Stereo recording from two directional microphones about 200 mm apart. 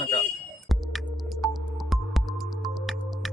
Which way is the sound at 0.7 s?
Centre (ahead or behind).